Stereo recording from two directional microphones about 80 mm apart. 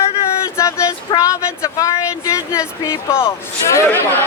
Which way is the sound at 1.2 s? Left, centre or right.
Left.